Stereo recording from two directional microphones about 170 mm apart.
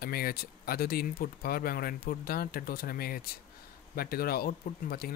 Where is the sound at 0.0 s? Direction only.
60° left (ahead or behind).